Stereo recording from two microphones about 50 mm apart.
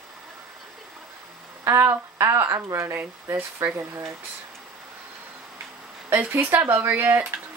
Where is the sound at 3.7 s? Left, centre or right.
Right.